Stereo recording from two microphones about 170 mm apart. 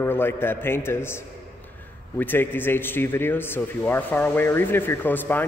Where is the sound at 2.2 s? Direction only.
10° left (ahead or behind).